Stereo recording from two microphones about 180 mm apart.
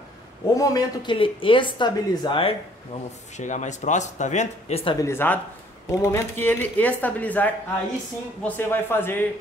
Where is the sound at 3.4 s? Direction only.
40° left (ahead or behind).